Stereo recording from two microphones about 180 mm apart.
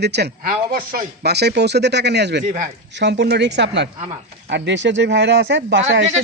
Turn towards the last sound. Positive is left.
turn(degrees=-90)